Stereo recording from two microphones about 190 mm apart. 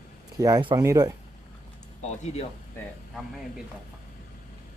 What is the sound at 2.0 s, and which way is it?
Speech, 35° left (ahead or behind).